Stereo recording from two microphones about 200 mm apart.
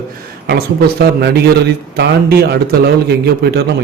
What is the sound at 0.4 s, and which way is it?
A man's voice, 55° right (ahead or behind).